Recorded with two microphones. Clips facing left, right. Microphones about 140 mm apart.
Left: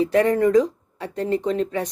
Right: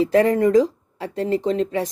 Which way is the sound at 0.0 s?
30° right (ahead or behind).